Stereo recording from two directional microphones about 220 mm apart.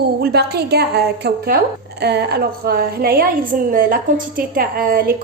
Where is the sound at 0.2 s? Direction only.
45° right (ahead or behind).